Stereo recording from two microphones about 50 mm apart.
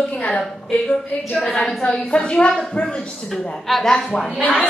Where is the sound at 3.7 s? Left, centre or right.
Centre.